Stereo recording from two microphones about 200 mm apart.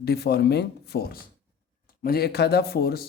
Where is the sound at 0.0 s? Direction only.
55° left (ahead or behind).